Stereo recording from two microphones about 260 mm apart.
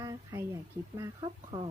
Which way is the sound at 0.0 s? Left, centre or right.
Centre.